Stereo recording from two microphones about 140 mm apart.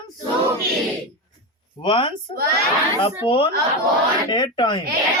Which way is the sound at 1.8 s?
40° left (ahead or behind).